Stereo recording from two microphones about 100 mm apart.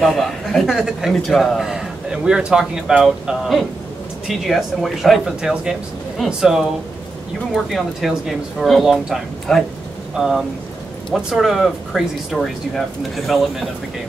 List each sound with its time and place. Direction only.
0.0 s a man's voice: centre (ahead or behind)